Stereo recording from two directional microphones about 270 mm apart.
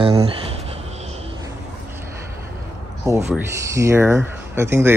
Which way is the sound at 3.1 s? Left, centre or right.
Centre.